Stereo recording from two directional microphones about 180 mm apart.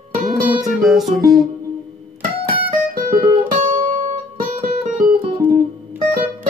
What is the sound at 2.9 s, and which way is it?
Music, 50° right (ahead or behind).